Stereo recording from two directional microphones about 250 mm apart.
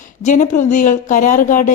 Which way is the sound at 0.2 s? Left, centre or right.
Left.